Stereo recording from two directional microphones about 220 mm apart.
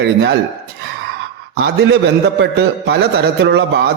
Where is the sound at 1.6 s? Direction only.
50° right (ahead or behind).